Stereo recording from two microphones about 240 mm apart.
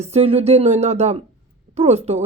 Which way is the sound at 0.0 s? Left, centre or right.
Right.